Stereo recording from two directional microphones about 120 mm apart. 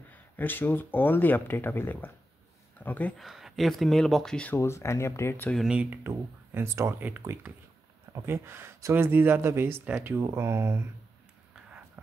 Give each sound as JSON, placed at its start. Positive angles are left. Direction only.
{"t": 0.1, "sound": "speech", "side_deg": 15}
{"t": 3.2, "sound": "speech", "side_deg": 0}
{"t": 4.6, "sound": "speech", "side_deg": 25}
{"t": 5.5, "sound": "speech", "side_deg": 0}
{"t": 6.0, "sound": "speech", "side_deg": -20}